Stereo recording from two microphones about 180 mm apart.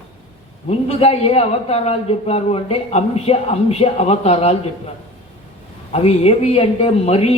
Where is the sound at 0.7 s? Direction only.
35° left (ahead or behind).